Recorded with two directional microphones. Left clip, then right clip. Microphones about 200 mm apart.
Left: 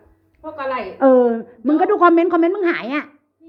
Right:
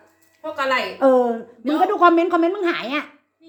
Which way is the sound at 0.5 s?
30° left (ahead or behind).